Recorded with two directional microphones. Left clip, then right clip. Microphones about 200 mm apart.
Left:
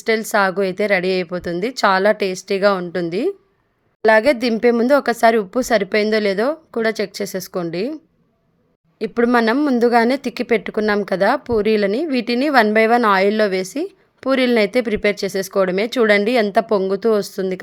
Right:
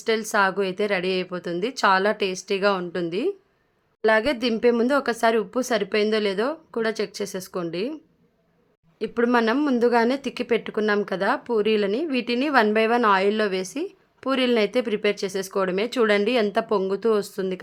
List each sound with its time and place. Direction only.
0.0 s a woman's voice: 20° left (ahead or behind)
9.0 s a woman's voice: 20° left (ahead or behind)